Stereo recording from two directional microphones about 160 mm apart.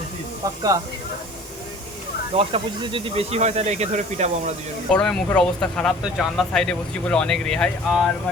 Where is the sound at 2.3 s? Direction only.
35° right (ahead or behind).